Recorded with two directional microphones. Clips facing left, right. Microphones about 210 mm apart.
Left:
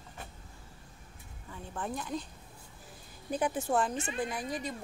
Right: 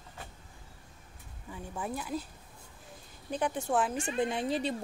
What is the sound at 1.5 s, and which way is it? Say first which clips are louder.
Speech: right 1 dB; 10° right (ahead or behind).